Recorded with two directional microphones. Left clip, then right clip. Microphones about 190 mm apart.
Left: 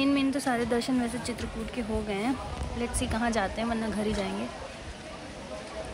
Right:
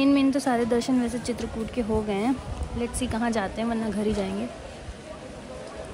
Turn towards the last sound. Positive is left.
turn(degrees=-15)  # may be behind; listen again after turning